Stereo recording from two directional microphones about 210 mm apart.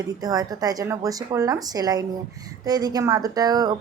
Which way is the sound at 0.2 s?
15° right (ahead or behind).